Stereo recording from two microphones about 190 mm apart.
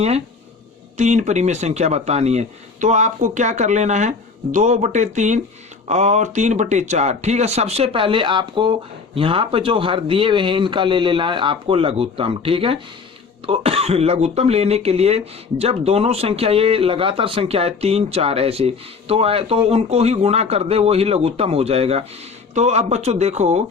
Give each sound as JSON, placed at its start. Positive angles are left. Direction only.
{"t": 0.9, "sound": "speech", "side_deg": -40}